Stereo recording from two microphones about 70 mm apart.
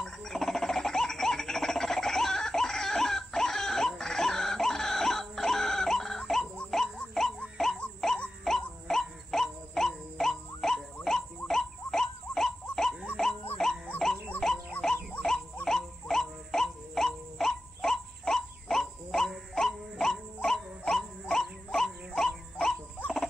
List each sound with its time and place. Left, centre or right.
0.0 s a sound: centre
6.7 s music: centre
8.5 s wail: centre
13.2 s music: centre
14.4 s insect: centre
15.6 s wail: centre
20.4 s dog: centre